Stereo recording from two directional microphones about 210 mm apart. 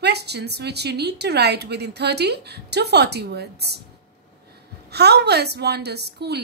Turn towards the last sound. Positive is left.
turn(degrees=-50)  # may be behind; listen again after turning